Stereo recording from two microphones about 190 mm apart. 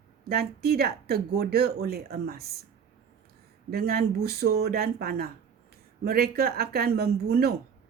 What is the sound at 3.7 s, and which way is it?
Speech, 55° right (ahead or behind).